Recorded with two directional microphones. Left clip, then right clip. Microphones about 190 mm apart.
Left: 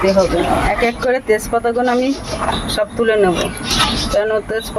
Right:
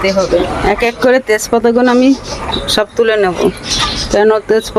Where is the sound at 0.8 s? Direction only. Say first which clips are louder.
Right 5 dB; 60° right (ahead or behind).